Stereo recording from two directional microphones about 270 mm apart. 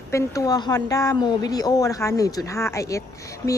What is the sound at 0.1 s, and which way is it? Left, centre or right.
A woman's voice, centre.